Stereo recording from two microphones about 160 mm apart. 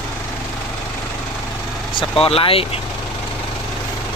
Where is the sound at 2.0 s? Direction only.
35° left (ahead or behind).